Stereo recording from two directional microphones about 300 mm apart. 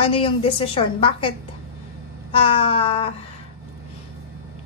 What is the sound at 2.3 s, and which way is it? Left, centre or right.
Speech, centre.